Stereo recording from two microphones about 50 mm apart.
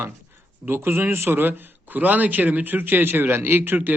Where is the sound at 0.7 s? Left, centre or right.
Right.